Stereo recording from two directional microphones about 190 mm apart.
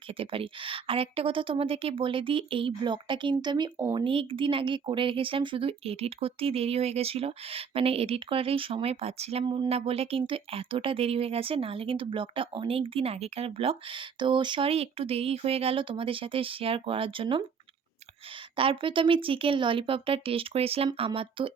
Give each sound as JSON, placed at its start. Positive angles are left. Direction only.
{"t": 0.2, "sound": "speech", "side_deg": -30}
{"t": 18.5, "sound": "speech", "side_deg": -30}